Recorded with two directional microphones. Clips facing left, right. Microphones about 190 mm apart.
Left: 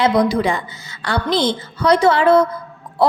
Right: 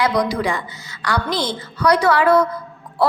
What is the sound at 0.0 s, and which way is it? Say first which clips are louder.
A woman's voice: left 3 dB; 25° left (ahead or behind).